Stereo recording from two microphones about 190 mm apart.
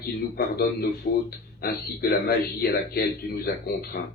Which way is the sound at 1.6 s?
55° left (ahead or behind).